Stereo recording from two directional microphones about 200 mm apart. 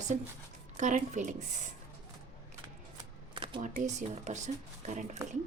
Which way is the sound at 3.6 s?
40° right (ahead or behind).